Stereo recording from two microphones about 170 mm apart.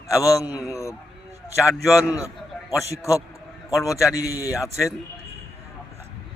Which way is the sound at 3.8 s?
20° left (ahead or behind).